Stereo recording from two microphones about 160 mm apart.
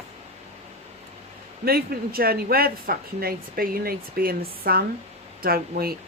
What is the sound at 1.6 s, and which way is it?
Speech, 70° right (ahead or behind).